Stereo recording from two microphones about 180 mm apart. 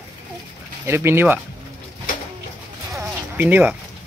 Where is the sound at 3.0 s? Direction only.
10° right (ahead or behind).